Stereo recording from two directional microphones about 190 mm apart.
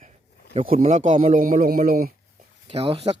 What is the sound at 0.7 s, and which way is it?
A man's voice, 40° right (ahead or behind).